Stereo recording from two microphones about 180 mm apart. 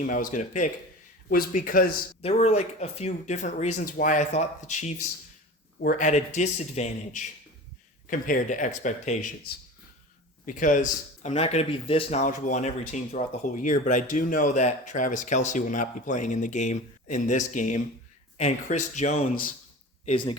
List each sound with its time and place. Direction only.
0.0 s speech: 45° left (ahead or behind)
2.2 s speech: 40° left (ahead or behind)
10.4 s speech: 45° left (ahead or behind)
12.2 s speech: 45° left (ahead or behind)
20.1 s speech: 30° left (ahead or behind)